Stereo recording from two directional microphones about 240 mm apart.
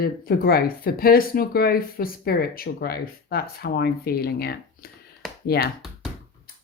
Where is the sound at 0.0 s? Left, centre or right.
Left.